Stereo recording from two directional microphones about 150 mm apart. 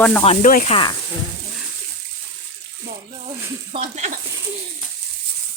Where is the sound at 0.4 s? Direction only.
60° left (ahead or behind).